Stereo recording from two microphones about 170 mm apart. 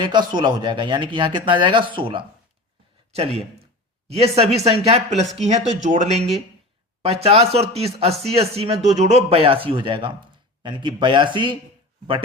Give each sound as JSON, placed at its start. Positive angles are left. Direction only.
{"t": 0.0, "sound": "speech", "side_deg": -25}